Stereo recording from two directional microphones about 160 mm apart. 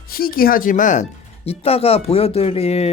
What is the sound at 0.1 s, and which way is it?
Speech, 65° left (ahead or behind).